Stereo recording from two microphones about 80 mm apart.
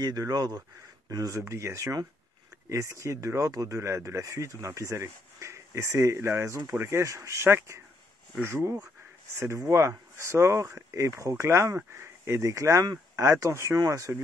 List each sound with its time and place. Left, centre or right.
0.0 s a man's voice: right
1.4 s speech: right
9.4 s speech: right